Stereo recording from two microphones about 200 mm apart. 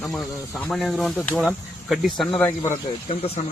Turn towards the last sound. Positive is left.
turn(degrees=30)  # may be behind; listen again after turning